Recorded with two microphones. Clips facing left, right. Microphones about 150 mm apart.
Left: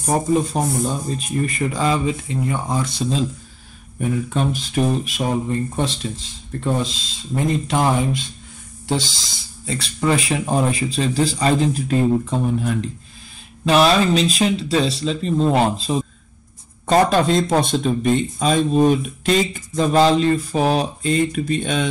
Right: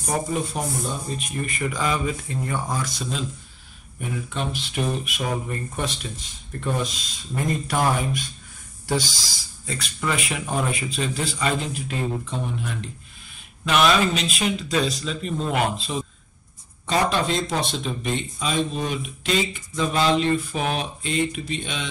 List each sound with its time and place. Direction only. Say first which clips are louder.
0.1 s speech: left 7 dB; 35° left (ahead or behind)
4.3 s speech: left 7 dB; 45° left (ahead or behind)
13.7 s speech: left 5 dB; 35° left (ahead or behind)
16.8 s speech: left 7 dB; 45° left (ahead or behind)